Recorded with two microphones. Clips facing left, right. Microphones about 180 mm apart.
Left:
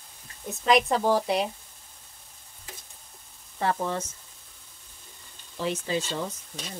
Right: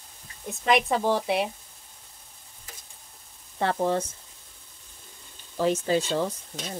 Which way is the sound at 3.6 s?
35° right (ahead or behind).